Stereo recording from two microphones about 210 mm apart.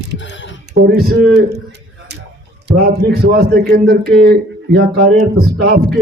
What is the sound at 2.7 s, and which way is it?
A man's voice, 50° right (ahead or behind).